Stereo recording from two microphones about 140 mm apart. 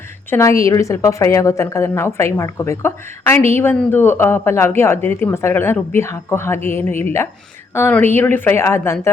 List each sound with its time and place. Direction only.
0.3 s a woman's voice: 20° left (ahead or behind)